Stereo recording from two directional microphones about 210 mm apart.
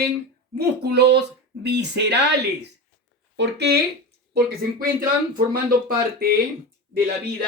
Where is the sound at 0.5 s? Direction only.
50° right (ahead or behind).